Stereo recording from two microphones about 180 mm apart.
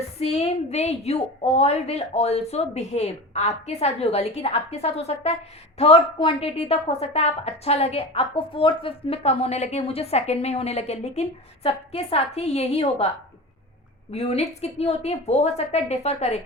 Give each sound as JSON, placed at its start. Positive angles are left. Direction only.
{"t": 0.2, "sound": "a woman's voice", "side_deg": 35}
{"t": 14.1, "sound": "a woman's voice", "side_deg": 35}